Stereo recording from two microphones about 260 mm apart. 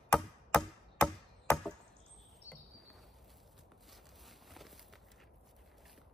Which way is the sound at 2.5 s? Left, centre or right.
Centre.